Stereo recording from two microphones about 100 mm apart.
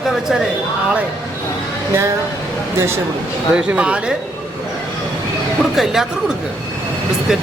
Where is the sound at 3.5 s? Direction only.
10° right (ahead or behind).